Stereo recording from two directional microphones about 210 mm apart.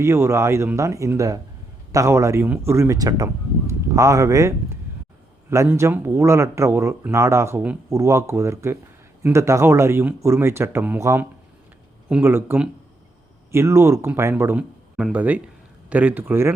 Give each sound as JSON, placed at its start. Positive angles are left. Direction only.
{"t": 0.0, "sound": "speech", "side_deg": -15}